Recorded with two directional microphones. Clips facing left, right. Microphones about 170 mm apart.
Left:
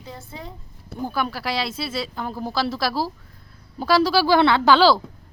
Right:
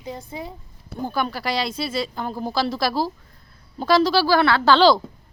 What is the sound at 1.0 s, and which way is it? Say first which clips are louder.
A man's voice: right 1 dB; 5° left (ahead or behind).